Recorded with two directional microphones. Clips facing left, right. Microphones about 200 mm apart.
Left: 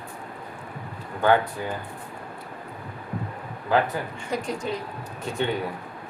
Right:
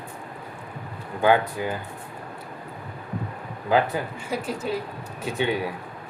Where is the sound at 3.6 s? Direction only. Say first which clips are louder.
Right 1 dB; 10° right (ahead or behind).